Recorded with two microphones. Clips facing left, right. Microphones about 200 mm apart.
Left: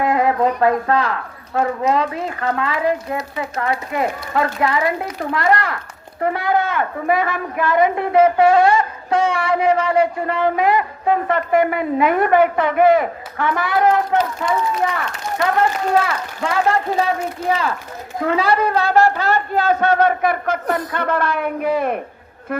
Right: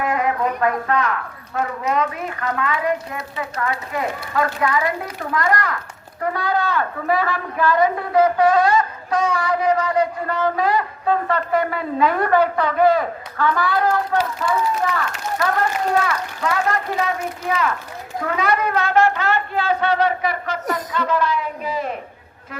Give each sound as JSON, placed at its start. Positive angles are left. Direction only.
{"t": 0.0, "sound": "a woman's voice", "side_deg": 35}
{"t": 16.0, "sound": "a man's voice", "side_deg": 30}